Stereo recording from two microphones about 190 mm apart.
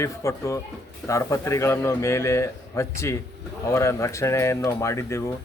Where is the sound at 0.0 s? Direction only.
15° left (ahead or behind).